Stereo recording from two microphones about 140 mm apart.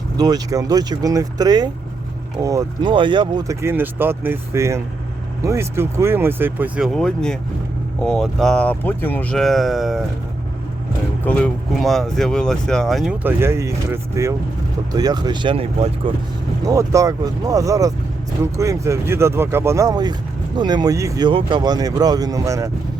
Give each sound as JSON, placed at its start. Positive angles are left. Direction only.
{"t": 0.2, "sound": "speech", "side_deg": -30}
{"t": 2.9, "sound": "speech", "side_deg": -35}
{"t": 9.4, "sound": "speech", "side_deg": 0}
{"t": 11.3, "sound": "speech", "side_deg": 5}
{"t": 13.2, "sound": "speech", "side_deg": -15}
{"t": 16.6, "sound": "speech", "side_deg": -25}